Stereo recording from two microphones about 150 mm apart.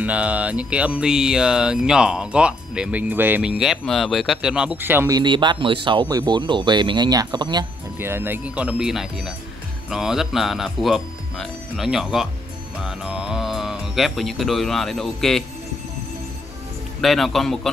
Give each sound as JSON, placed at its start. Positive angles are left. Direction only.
{"t": 0.0, "sound": "speech", "side_deg": -10}
{"t": 5.1, "sound": "speech", "side_deg": -30}
{"t": 8.0, "sound": "speech", "side_deg": -15}
{"t": 17.0, "sound": "speech", "side_deg": 0}